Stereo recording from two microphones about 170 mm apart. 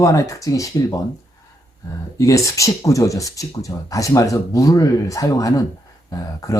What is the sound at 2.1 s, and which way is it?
Speech, 20° left (ahead or behind).